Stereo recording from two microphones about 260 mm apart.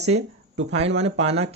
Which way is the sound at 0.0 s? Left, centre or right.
Right.